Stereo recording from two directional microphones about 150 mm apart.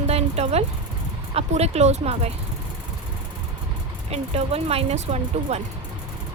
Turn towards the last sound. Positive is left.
turn(degrees=-45)  # may be behind; listen again after turning